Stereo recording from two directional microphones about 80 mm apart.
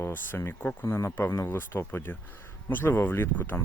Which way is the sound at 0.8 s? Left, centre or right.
Left.